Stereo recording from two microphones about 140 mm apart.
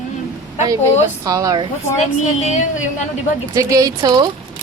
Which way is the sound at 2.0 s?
55° left (ahead or behind).